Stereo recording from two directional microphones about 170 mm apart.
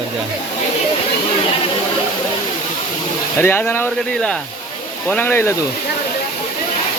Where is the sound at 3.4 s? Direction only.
15° left (ahead or behind).